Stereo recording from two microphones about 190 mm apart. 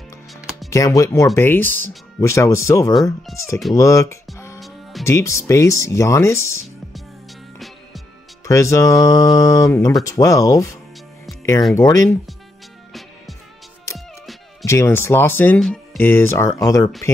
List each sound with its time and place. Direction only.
0.7 s speech: 15° left (ahead or behind)
4.6 s music: centre (ahead or behind)
5.0 s speech: 15° left (ahead or behind)
7.5 s music: centre (ahead or behind)
8.5 s speech: 15° left (ahead or behind)
9.0 s a sound: 20° left (ahead or behind)
10.0 s speech: 20° left (ahead or behind)
11.7 s speech: 15° left (ahead or behind)
14.6 s speech: 15° left (ahead or behind)